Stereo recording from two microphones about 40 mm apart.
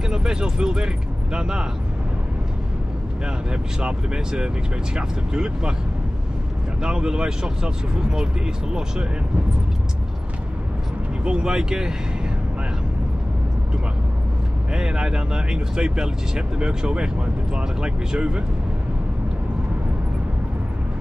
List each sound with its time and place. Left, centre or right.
0.1 s speech: centre
3.8 s speech: centre
6.8 s speech: centre
11.2 s speech: right
14.7 s speech: centre